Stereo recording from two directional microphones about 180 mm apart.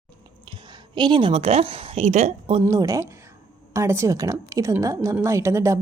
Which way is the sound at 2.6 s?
20° right (ahead or behind).